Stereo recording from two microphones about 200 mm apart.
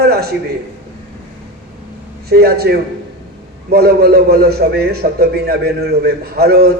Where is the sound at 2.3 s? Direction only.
50° right (ahead or behind).